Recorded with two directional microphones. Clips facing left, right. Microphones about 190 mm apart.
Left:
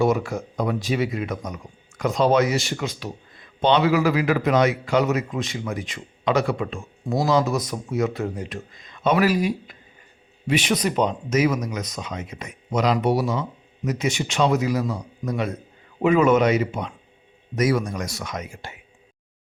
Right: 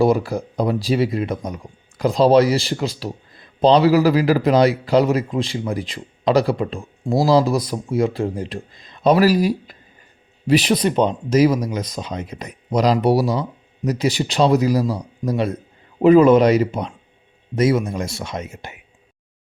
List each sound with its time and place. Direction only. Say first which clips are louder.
0.0 s speech: right 4 dB; 35° right (ahead or behind)